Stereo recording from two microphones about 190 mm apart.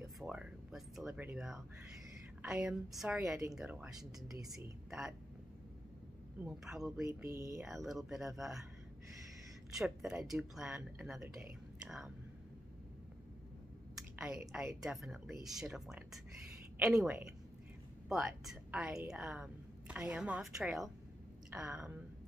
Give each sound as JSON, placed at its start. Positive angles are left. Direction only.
{"t": 0.2, "sound": "a sound", "side_deg": -5}
{"t": 2.4, "sound": "a woman's voice", "side_deg": -5}
{"t": 6.4, "sound": "a woman's voice", "side_deg": -5}
{"t": 7.1, "sound": "speech", "side_deg": -15}
{"t": 7.5, "sound": "a woman's voice", "side_deg": 0}
{"t": 9.7, "sound": "a woman's voice", "side_deg": 0}
{"t": 13.9, "sound": "a sound", "side_deg": -5}
{"t": 14.5, "sound": "a woman's voice", "side_deg": -5}